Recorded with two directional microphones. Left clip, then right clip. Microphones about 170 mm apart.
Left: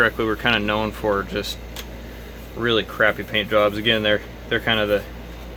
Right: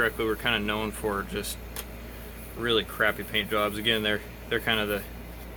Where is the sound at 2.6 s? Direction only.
40° left (ahead or behind).